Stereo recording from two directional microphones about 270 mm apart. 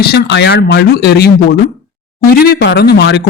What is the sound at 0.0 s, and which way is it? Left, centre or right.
Speech, left.